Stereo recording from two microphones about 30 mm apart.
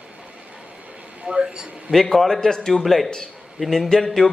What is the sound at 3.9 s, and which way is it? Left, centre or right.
Speech, left.